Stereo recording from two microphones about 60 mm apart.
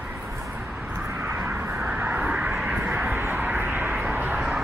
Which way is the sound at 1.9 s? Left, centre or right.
Right.